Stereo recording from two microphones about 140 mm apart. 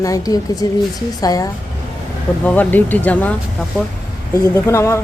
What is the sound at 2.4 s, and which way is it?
A man's voice, 10° left (ahead or behind).